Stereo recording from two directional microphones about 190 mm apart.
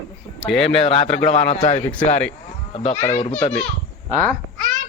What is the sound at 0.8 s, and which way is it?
Speech, 30° left (ahead or behind).